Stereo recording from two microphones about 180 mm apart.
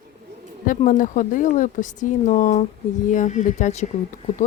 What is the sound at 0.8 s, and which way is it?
Speech, 45° left (ahead or behind).